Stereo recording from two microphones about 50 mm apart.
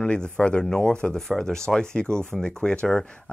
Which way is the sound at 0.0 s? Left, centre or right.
Centre.